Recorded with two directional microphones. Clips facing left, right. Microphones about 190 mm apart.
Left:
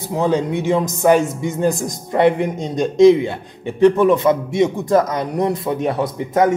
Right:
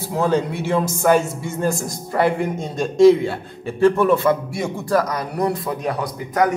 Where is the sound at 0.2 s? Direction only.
15° left (ahead or behind).